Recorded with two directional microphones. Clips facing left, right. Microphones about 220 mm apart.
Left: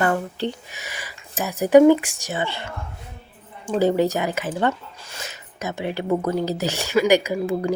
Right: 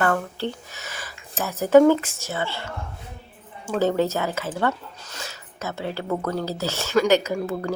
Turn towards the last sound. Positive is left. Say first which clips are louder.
# left 3 dB
turn(degrees=15)  # may be behind; listen again after turning